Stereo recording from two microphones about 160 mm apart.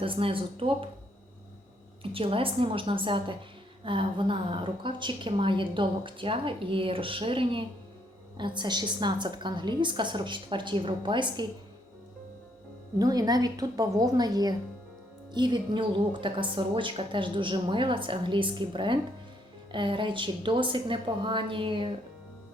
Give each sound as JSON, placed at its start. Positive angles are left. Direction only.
{"t": 0.0, "sound": "a woman's voice", "side_deg": -35}
{"t": 2.1, "sound": "a woman's voice", "side_deg": -35}
{"t": 13.0, "sound": "a woman's voice", "side_deg": -25}